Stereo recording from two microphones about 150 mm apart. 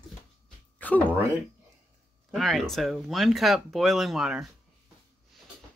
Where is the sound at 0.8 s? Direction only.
10° left (ahead or behind).